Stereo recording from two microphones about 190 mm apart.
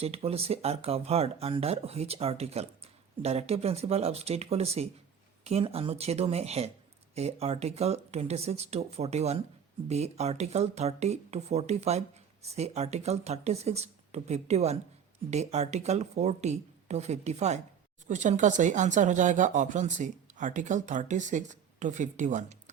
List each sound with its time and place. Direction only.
0.0 s speech: 30° right (ahead or behind)